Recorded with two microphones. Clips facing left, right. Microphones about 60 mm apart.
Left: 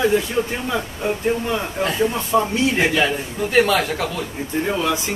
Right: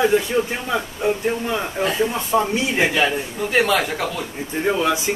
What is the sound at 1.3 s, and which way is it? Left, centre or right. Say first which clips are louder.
A man's voice: left 1 dB; centre.